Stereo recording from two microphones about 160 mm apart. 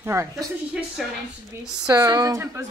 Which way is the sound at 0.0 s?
15° right (ahead or behind).